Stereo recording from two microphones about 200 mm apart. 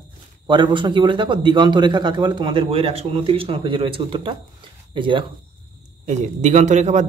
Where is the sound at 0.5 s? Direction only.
25° right (ahead or behind).